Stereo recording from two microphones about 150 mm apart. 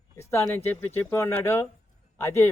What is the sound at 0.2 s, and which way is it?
Speech, 15° left (ahead or behind).